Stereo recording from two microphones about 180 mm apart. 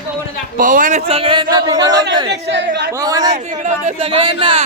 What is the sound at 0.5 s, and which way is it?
Speech, 50° right (ahead or behind).